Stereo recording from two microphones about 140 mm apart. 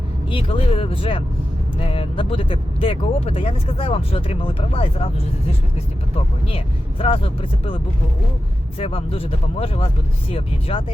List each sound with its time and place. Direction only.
0.3 s speech: 40° left (ahead or behind)
7.0 s speech: 40° left (ahead or behind)
8.8 s speech: 40° left (ahead or behind)